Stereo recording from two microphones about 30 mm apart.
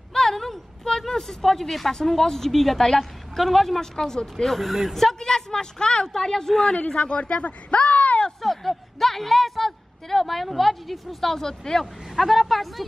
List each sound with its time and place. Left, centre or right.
0.1 s a sound: centre
1.9 s a woman's voice: centre
3.8 s a woman's voice: centre
7.0 s speech: left
8.4 s a sound: centre
10.5 s a woman's voice: centre
12.1 s speech: centre